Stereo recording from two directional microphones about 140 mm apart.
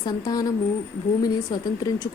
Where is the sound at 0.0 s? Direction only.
25° left (ahead or behind).